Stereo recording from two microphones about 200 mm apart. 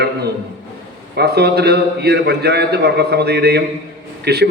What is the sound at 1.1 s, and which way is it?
A man's voice, 55° right (ahead or behind).